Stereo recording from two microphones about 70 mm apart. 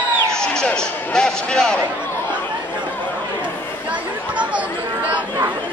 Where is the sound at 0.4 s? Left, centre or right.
Centre.